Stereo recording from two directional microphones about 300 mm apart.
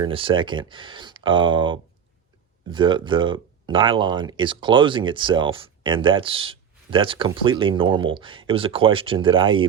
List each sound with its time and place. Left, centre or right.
0.0 s speech: centre